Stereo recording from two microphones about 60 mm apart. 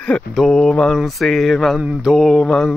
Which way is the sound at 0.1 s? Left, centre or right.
Centre.